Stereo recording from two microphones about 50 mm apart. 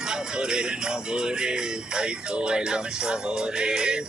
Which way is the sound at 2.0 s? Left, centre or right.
Centre.